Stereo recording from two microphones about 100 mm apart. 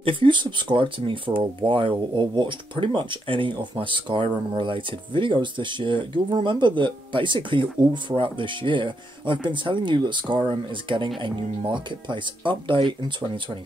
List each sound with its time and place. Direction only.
0.0 s speech: 55° right (ahead or behind)